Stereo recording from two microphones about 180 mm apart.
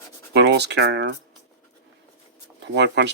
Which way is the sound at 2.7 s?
75° right (ahead or behind).